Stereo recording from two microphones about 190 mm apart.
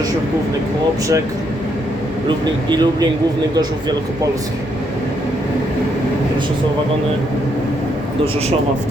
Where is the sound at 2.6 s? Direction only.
20° right (ahead or behind).